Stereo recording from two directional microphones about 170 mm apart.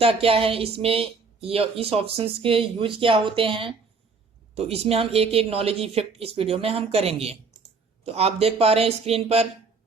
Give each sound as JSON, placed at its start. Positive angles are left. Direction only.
{"t": 0.0, "sound": "speech", "side_deg": -35}